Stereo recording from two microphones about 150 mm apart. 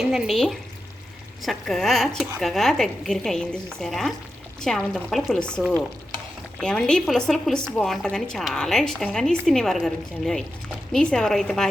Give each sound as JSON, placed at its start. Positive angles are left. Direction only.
{"t": 0.0, "sound": "a woman's voice", "side_deg": 0}